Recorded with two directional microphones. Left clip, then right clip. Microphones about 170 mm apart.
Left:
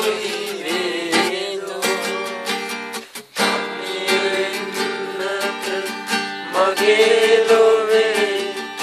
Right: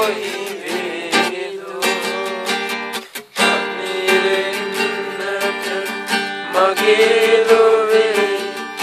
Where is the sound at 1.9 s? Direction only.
45° right (ahead or behind).